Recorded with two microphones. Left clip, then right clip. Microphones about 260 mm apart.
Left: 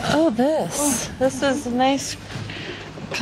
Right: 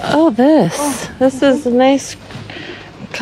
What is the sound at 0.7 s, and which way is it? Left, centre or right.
Speech, right.